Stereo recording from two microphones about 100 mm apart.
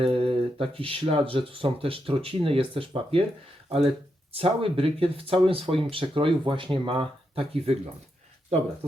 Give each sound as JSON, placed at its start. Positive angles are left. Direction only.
{"t": 0.0, "sound": "speech", "side_deg": -75}
{"t": 3.7, "sound": "speech", "side_deg": -75}